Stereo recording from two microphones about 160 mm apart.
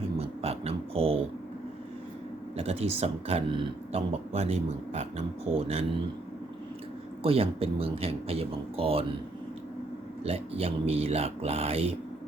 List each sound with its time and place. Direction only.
0.0 s a sound: 35° right (ahead or behind)
2.6 s speech: 40° right (ahead or behind)
7.2 s speech: 35° right (ahead or behind)
10.2 s speech: 40° right (ahead or behind)